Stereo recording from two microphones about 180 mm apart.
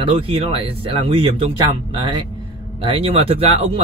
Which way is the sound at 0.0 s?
30° right (ahead or behind).